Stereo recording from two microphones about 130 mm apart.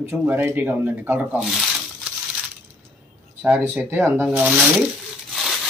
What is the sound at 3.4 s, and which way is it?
Speech, 10° right (ahead or behind).